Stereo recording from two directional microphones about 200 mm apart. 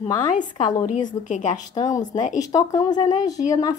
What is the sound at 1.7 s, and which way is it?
A woman's voice, 15° left (ahead or behind).